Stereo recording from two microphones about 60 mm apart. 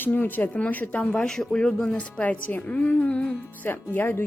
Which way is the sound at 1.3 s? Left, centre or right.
Centre.